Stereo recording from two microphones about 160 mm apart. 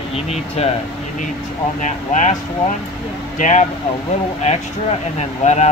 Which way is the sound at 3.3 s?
50° left (ahead or behind).